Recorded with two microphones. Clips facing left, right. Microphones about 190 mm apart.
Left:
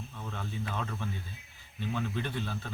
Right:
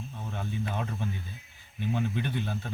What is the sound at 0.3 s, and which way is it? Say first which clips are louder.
Speech: right 3 dB; 20° right (ahead or behind).